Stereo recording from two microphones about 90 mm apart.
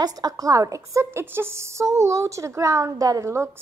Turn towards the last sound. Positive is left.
turn(degrees=-30)  # may be behind; listen again after turning